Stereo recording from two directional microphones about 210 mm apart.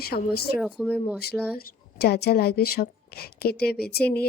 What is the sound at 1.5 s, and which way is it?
A woman's voice, 50° left (ahead or behind).